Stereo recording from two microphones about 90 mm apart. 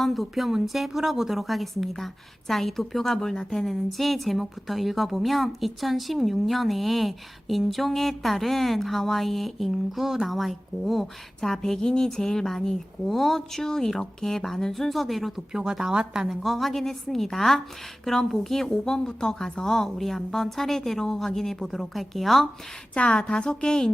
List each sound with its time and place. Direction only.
0.0 s a woman's voice: centre (ahead or behind)